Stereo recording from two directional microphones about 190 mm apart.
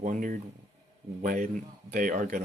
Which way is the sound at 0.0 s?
45° right (ahead or behind).